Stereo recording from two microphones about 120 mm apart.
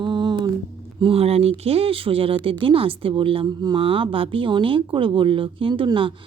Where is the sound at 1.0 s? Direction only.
55° right (ahead or behind).